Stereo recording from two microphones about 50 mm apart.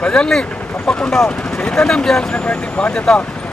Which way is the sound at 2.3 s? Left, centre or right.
Left.